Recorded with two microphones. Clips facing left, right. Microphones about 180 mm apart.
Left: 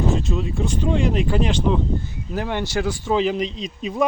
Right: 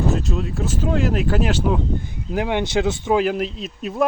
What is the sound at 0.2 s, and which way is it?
Speech, centre (ahead or behind).